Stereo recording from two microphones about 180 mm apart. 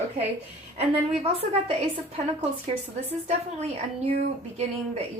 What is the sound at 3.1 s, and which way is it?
A woman's voice, 35° right (ahead or behind).